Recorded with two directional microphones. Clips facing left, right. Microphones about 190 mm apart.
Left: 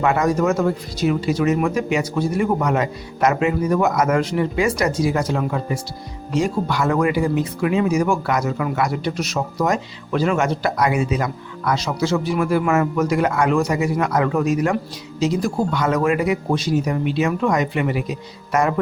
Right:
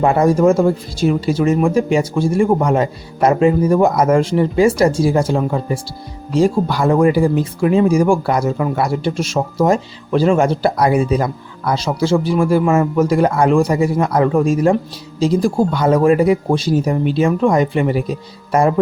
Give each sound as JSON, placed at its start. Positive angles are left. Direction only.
{"t": 0.0, "sound": "speech", "side_deg": -30}